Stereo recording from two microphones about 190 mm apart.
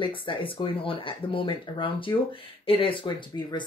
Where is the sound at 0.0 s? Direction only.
25° left (ahead or behind).